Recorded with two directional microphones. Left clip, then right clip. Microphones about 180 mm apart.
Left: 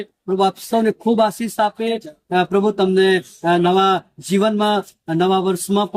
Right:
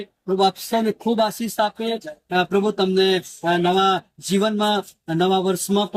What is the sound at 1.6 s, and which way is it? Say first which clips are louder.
Speech: left 3 dB; centre (ahead or behind).